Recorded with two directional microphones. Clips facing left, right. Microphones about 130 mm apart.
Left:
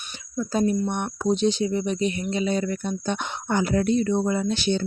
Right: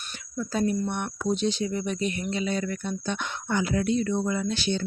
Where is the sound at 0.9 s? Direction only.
30° left (ahead or behind).